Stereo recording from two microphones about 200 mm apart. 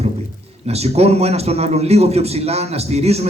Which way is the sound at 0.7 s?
30° right (ahead or behind).